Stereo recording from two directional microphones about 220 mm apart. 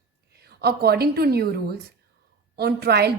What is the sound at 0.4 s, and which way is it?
A woman's voice, 45° right (ahead or behind).